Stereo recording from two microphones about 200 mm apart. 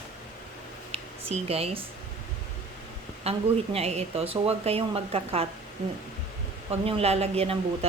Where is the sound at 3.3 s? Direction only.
30° right (ahead or behind).